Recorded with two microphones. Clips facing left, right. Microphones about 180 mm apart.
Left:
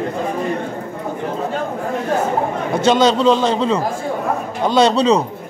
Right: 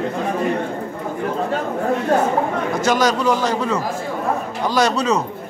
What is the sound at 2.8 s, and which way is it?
A man's voice, 25° left (ahead or behind).